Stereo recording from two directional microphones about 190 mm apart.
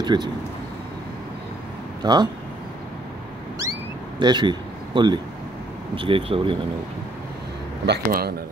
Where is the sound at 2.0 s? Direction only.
20° right (ahead or behind).